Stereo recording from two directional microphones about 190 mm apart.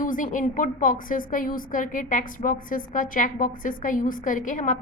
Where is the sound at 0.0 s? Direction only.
45° left (ahead or behind).